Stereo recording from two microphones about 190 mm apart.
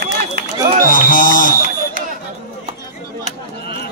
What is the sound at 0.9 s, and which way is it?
Music, 45° left (ahead or behind).